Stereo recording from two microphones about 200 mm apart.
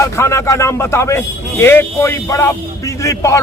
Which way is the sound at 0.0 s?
15° left (ahead or behind).